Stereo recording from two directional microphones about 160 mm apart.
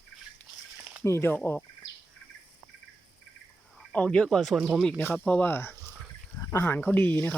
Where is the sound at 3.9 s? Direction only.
5° left (ahead or behind).